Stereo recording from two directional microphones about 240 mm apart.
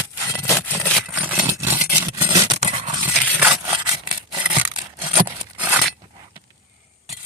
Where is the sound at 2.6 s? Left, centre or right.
Right.